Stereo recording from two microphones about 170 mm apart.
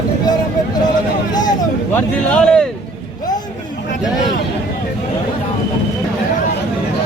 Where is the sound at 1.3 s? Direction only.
25° left (ahead or behind).